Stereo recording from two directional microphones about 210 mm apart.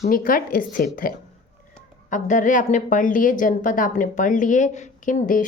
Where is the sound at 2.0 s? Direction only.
35° left (ahead or behind).